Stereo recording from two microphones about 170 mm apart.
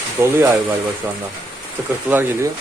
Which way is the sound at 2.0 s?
10° right (ahead or behind).